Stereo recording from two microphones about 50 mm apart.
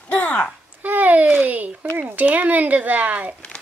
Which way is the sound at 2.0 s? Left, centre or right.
Right.